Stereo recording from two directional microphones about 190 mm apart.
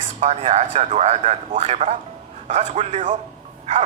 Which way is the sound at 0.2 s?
40° right (ahead or behind).